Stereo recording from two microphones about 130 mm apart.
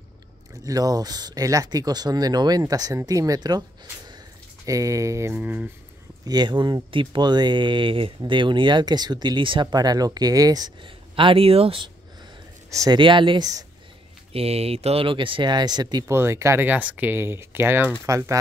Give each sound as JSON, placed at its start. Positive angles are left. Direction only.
{"t": 0.7, "sound": "speech", "side_deg": -30}
{"t": 4.6, "sound": "speech", "side_deg": -25}
{"t": 6.2, "sound": "speech", "side_deg": -35}
{"t": 12.9, "sound": "speech", "side_deg": -40}
{"t": 14.3, "sound": "speech", "side_deg": -50}
{"t": 16.1, "sound": "speech", "side_deg": -20}